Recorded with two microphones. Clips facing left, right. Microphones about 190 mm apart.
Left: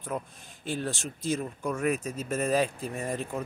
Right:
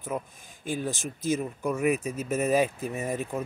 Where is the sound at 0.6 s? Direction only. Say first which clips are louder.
Right 2 dB; 15° right (ahead or behind).